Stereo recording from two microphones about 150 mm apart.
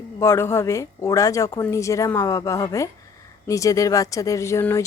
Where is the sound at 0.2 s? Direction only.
15° left (ahead or behind).